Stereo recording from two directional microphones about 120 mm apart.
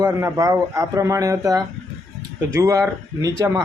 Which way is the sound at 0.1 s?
20° right (ahead or behind).